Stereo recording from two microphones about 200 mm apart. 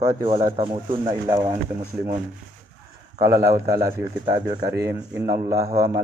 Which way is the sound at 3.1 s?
45° right (ahead or behind).